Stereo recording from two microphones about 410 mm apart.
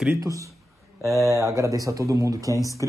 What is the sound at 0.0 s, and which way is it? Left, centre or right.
Speech, centre.